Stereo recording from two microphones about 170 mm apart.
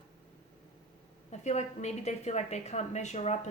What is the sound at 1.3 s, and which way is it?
Speech, 40° left (ahead or behind).